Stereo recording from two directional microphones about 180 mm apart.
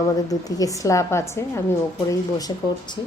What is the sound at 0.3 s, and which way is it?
A woman's voice, 20° left (ahead or behind).